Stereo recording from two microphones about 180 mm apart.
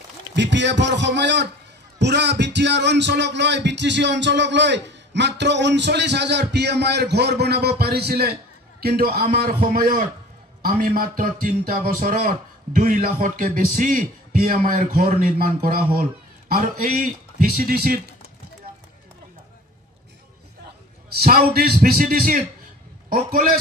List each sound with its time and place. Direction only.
0.4 s music: 75° right (ahead or behind); by 8.4 s 60° right (ahead or behind)
8.8 s a man's voice: 55° right (ahead or behind)
21.2 s a man's voice: 55° right (ahead or behind)